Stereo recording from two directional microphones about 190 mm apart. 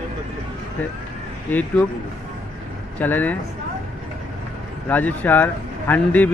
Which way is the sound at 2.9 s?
10° left (ahead or behind).